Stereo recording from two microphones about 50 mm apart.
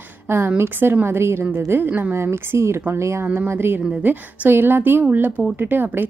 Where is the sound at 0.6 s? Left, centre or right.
Right.